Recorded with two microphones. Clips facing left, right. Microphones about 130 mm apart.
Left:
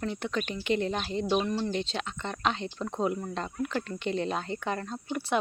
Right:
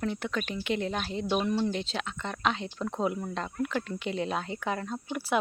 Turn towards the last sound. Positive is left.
turn(degrees=-5)  # may be behind; listen again after turning